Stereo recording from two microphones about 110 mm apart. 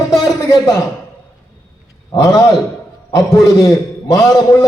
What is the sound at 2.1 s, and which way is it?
A man's voice, 30° left (ahead or behind).